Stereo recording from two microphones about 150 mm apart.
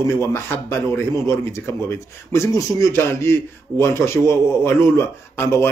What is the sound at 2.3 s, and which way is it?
A man's voice, 20° left (ahead or behind).